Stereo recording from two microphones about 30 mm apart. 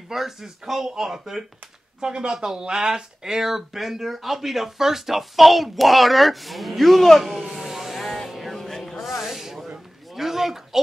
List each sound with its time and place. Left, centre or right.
0.1 s speech: centre
2.0 s speech: right; by 7.4 s centre
7.5 s vehicle: centre
8.0 s music: centre
10.1 s a sound: centre